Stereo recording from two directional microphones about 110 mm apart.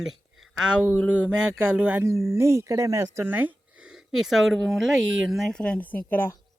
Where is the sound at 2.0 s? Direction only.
25° right (ahead or behind).